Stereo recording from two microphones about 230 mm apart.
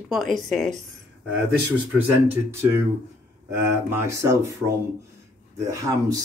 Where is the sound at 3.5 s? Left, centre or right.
Centre.